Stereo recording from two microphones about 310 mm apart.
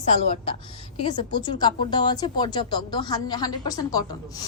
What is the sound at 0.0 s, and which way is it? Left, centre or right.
A woman's voice, left.